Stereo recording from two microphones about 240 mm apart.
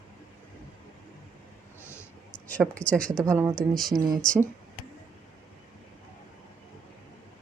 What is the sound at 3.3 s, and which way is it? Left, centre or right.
Speech, centre.